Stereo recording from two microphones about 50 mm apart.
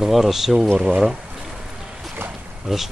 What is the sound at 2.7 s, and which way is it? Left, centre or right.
Speech, centre.